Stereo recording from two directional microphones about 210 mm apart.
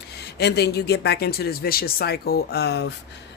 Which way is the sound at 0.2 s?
50° left (ahead or behind).